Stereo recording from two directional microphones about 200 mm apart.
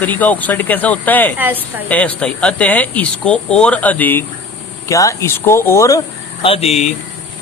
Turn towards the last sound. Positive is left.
turn(degrees=30)  # may be behind; listen again after turning